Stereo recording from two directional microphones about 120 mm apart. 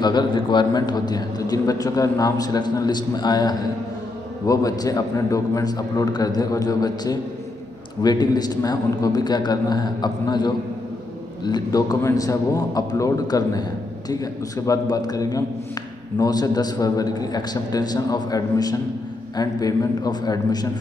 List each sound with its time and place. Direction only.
0.0 s a man's voice: 35° left (ahead or behind)